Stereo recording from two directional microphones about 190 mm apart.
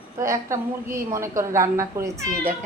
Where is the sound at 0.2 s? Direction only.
15° right (ahead or behind).